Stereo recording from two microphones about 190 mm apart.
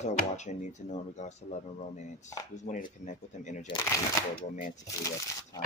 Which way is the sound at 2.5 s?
40° left (ahead or behind).